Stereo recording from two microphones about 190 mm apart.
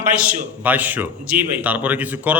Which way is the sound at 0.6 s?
10° right (ahead or behind).